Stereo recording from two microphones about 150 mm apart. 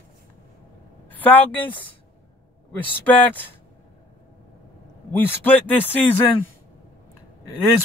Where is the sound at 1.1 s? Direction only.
10° left (ahead or behind).